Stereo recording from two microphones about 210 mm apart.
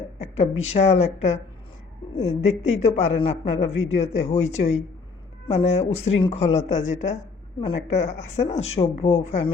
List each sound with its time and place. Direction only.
0.2 s speech: 30° left (ahead or behind)